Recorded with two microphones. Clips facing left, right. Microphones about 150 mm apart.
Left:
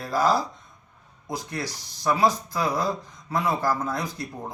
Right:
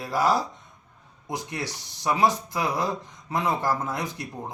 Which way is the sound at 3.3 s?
15° right (ahead or behind).